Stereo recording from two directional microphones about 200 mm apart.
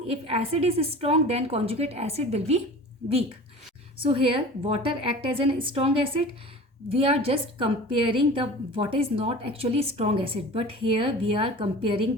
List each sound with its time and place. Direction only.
0.1 s a woman's voice: 30° right (ahead or behind)
6.9 s a woman's voice: 30° right (ahead or behind)